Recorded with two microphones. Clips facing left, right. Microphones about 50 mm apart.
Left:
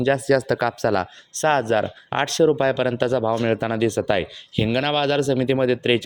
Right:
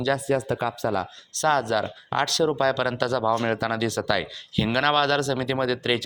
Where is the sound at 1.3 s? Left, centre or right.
Left.